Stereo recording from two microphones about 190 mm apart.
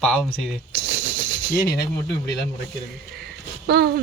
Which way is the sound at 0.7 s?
60° right (ahead or behind).